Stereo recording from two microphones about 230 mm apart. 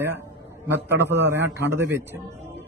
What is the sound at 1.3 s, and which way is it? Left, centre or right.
Speech, centre.